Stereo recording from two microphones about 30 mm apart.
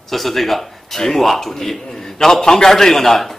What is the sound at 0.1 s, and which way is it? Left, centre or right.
A man's voice, centre.